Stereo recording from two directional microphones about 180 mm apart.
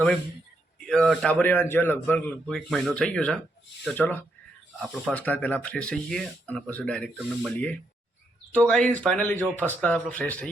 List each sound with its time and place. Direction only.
0.8 s speech: 5° left (ahead or behind)